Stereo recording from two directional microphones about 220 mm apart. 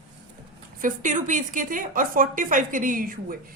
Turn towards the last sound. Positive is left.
turn(degrees=-40)  # may be behind; listen again after turning